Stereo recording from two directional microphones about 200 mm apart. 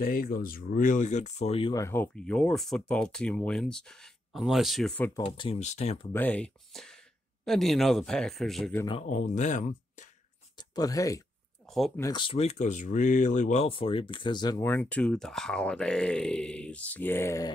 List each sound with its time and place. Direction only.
0.0 s speech: 45° left (ahead or behind); by 5.1 s 5° left (ahead or behind)
5.2 s speech: 30° left (ahead or behind)
6.1 s speech: 5° left (ahead or behind)
9.0 s speech: 40° left (ahead or behind)
10.7 s speech: 20° left (ahead or behind)
11.7 s a sound: centre (ahead or behind)
12.0 s speech: 20° left (ahead or behind)